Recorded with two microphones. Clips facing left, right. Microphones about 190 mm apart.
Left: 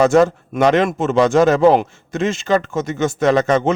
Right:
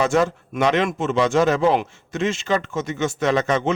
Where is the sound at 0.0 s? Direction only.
40° left (ahead or behind).